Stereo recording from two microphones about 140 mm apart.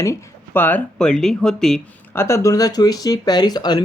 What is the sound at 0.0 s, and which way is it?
Speech, 20° left (ahead or behind).